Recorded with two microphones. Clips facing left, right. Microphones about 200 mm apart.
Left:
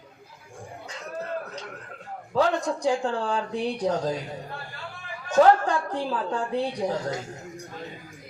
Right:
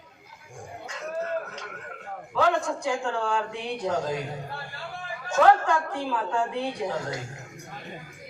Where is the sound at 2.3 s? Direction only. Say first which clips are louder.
Left 1 dB; 35° left (ahead or behind).